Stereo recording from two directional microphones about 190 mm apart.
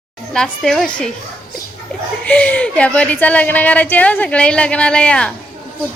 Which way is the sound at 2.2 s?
5° left (ahead or behind).